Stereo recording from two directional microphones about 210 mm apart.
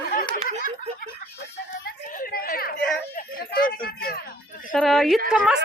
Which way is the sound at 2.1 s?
45° left (ahead or behind).